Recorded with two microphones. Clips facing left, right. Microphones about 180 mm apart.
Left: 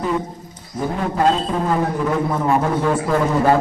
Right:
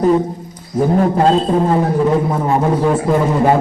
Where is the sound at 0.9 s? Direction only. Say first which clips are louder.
Right 4 dB; 40° right (ahead or behind).